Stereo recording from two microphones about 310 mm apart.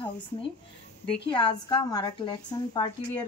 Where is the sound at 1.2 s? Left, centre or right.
Centre.